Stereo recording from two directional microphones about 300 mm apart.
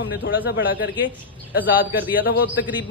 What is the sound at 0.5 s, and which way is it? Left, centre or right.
Speech, left.